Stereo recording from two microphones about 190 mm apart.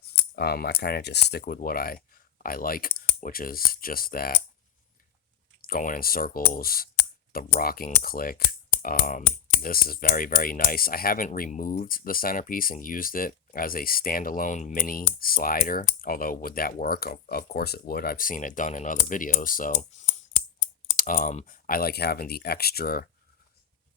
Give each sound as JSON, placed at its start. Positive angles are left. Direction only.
{"t": 0.3, "sound": "speech", "side_deg": 55}
{"t": 5.6, "sound": "speech", "side_deg": 50}
{"t": 20.9, "sound": "speech", "side_deg": 45}